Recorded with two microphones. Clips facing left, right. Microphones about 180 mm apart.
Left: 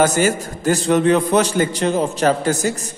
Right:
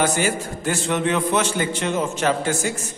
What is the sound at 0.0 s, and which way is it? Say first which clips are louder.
A man's voice: left 5 dB; 40° left (ahead or behind).